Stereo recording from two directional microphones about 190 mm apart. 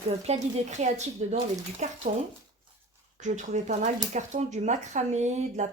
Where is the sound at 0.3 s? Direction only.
35° right (ahead or behind).